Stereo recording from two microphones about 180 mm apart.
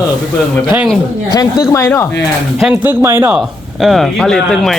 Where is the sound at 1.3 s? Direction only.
20° left (ahead or behind).